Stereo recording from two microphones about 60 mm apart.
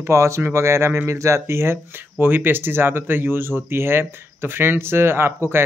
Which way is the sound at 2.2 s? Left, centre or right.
Right.